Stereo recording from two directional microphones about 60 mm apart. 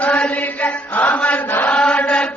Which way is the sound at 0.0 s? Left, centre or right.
Left.